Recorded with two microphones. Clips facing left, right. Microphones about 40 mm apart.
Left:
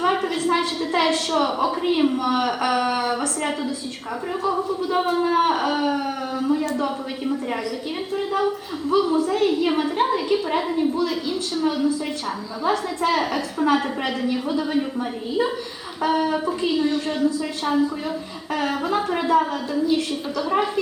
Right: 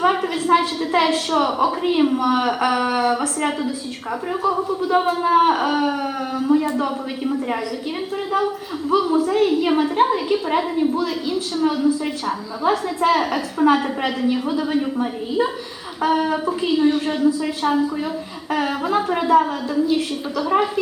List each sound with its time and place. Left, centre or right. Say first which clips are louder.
0.0 s a woman's voice: right 2 dB; centre
16.8 s a woman's voice: right 4 dB; centre
17.2 s a woman's voice: right 3 dB; centre